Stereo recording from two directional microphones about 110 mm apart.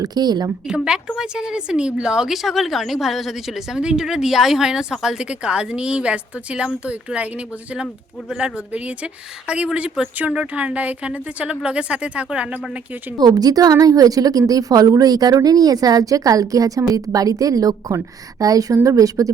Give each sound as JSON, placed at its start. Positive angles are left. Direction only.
{"t": 0.0, "sound": "a woman's voice", "side_deg": -40}
{"t": 0.7, "sound": "a woman's voice", "side_deg": -5}
{"t": 13.1, "sound": "a woman's voice", "side_deg": -35}